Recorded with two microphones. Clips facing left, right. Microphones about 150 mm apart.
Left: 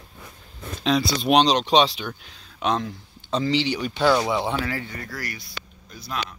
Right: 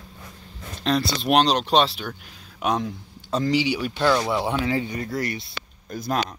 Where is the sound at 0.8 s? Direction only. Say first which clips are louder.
Left 1 dB; centre (ahead or behind).